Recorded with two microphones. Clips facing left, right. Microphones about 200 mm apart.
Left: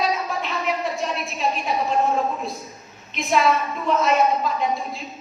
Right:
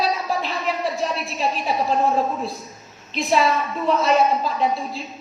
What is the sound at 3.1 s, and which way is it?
A woman's voice, 35° right (ahead or behind).